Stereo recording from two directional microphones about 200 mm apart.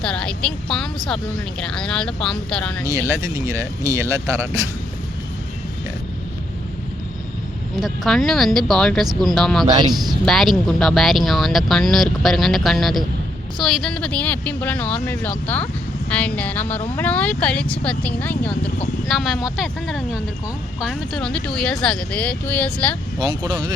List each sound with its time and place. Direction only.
0.0 s speech: 5° left (ahead or behind)
3.1 s speech: 15° right (ahead or behind)
7.8 s speech: centre (ahead or behind)
9.6 s speech: 20° right (ahead or behind)
10.2 s speech: centre (ahead or behind)
23.2 s speech: 20° right (ahead or behind)